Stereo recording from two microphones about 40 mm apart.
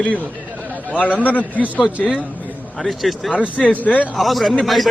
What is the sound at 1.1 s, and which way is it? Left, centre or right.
Speech, left.